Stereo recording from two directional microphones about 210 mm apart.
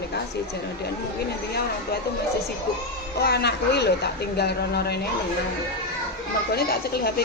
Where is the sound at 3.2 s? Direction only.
50° left (ahead or behind).